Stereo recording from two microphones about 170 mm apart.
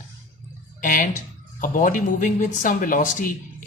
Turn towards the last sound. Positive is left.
turn(degrees=50)  # may be behind; listen again after turning